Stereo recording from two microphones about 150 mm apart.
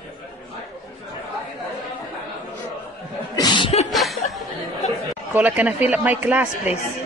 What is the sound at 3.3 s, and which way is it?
Chuckle, 30° left (ahead or behind).